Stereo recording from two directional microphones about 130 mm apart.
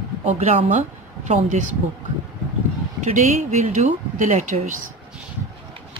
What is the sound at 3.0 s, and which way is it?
Speech, 65° right (ahead or behind).